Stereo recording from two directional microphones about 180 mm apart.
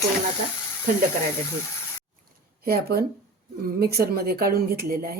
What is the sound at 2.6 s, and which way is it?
A woman's voice, 60° right (ahead or behind).